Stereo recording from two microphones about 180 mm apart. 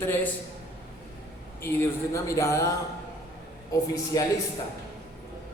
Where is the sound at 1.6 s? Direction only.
15° left (ahead or behind).